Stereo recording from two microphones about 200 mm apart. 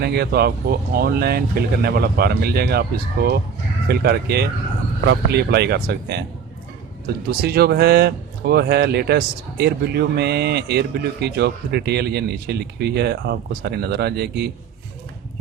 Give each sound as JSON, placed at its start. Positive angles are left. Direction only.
{"t": 0.0, "sound": "speech", "side_deg": -55}
{"t": 7.3, "sound": "speech", "side_deg": -50}